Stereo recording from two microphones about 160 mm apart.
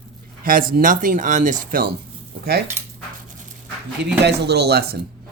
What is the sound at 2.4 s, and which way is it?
Speech, 75° right (ahead or behind).